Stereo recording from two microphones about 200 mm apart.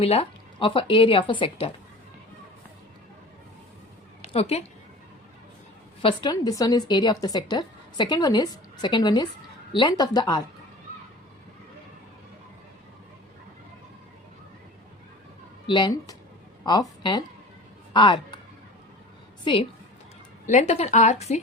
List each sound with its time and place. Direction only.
0.0 s a woman's voice: 30° left (ahead or behind)
4.3 s a woman's voice: 30° left (ahead or behind)
6.0 s a woman's voice: 25° left (ahead or behind)
15.6 s a woman's voice: 25° left (ahead or behind)
19.5 s a woman's voice: 25° left (ahead or behind)
20.5 s a woman's voice: 35° left (ahead or behind)